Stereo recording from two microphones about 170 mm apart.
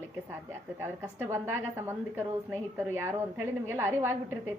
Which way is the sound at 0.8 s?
15° right (ahead or behind).